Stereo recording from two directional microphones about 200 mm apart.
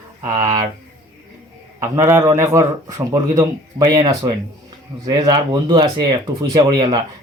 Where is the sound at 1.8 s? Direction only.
15° right (ahead or behind).